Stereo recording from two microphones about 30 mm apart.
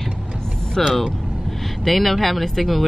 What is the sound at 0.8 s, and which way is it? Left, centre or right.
Speech, centre.